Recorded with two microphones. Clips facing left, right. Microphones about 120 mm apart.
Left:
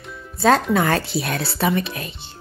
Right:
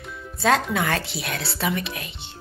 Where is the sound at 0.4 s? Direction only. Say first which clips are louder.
Left 5 dB; 40° left (ahead or behind).